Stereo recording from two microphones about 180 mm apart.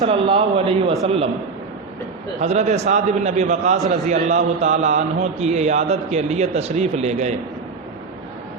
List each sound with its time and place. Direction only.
0.0 s speech: 30° right (ahead or behind)
2.4 s speech: 40° right (ahead or behind)